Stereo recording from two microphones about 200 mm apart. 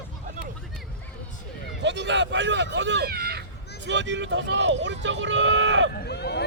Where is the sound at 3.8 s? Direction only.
65° right (ahead or behind).